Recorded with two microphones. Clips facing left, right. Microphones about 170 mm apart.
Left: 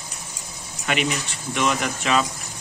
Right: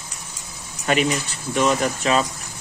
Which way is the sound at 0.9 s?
40° right (ahead or behind).